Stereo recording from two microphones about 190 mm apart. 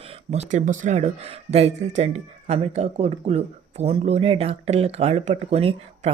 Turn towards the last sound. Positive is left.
turn(degrees=-30)  # may be behind; listen again after turning